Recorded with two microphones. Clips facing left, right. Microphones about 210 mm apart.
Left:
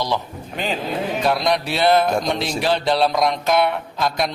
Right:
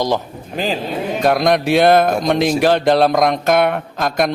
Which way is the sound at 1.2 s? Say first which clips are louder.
Right 7 dB; 50° right (ahead or behind).